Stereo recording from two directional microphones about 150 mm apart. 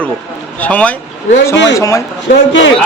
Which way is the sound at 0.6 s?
10° left (ahead or behind).